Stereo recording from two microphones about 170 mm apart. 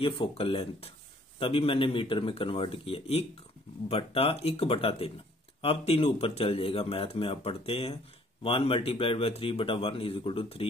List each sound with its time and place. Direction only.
0.0 s speech: 35° left (ahead or behind)